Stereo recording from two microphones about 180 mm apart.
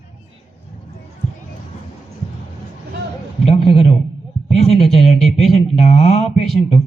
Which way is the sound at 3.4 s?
35° left (ahead or behind).